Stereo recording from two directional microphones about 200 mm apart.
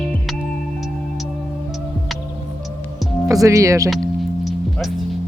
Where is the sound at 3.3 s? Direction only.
15° right (ahead or behind).